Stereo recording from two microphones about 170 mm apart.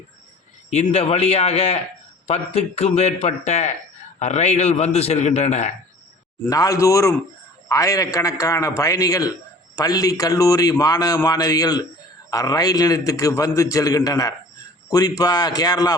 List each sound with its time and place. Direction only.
0.7 s a man's voice: 40° left (ahead or behind)
6.5 s a man's voice: 20° left (ahead or behind)